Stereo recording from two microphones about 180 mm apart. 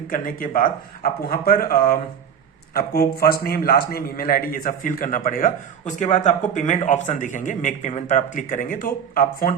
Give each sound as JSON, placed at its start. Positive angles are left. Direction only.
{"t": 0.1, "sound": "a man's voice", "side_deg": 50}